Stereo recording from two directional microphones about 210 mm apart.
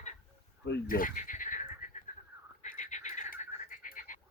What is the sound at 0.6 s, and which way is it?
Neigh, 50° left (ahead or behind).